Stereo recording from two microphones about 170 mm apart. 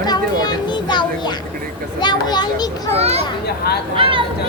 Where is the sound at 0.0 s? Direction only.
25° left (ahead or behind).